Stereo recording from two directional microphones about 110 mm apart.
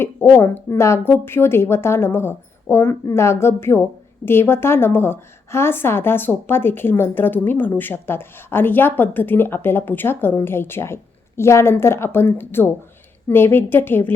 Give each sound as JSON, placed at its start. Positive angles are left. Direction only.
{"t": 0.0, "sound": "a woman's voice", "side_deg": 20}